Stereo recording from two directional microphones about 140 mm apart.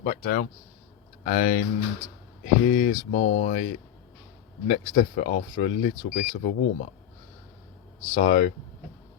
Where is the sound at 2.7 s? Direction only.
60° left (ahead or behind).